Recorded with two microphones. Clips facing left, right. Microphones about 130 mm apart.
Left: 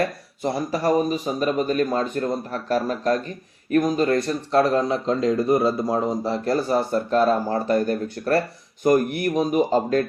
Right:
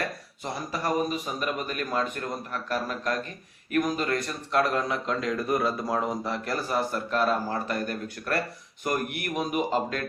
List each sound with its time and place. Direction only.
0.4 s speech: 35° left (ahead or behind)